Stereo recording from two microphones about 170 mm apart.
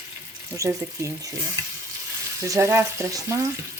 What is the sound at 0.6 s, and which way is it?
Speech, 20° right (ahead or behind).